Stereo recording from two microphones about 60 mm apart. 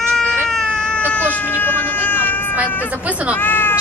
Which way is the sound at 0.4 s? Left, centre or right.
Centre.